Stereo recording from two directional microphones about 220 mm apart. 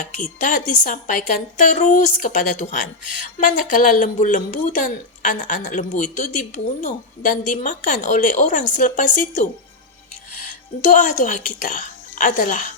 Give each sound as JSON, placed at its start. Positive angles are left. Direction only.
{"t": 0.0, "sound": "speech", "side_deg": 35}
{"t": 11.0, "sound": "speech", "side_deg": 35}